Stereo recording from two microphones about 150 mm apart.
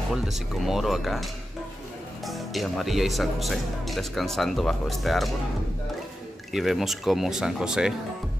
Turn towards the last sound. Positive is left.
turn(degrees=-5)  # may be behind; listen again after turning